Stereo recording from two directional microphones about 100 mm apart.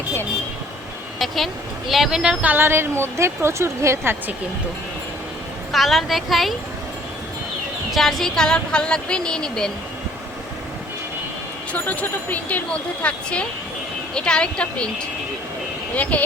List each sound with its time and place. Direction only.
1.9 s speech: 5° right (ahead or behind); by 4.4 s 20° right (ahead or behind)
5.7 s a woman's voice: centre (ahead or behind)
7.9 s speech: centre (ahead or behind)
11.7 s speech: 15° left (ahead or behind)
16.0 s speech: 15° left (ahead or behind)